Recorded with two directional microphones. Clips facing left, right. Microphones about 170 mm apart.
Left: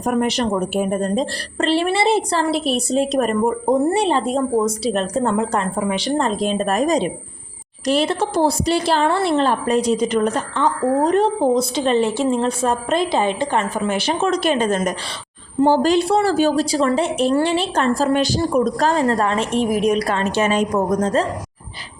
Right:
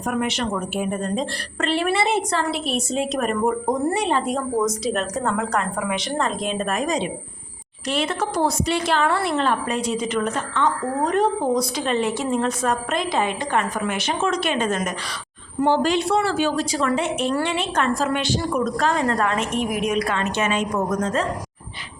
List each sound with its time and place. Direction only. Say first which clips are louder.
0.0 s a woman's voice: left 5 dB; 35° left (ahead or behind)